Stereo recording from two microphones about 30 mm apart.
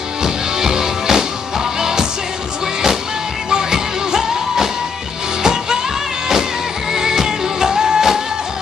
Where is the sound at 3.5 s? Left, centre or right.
Centre.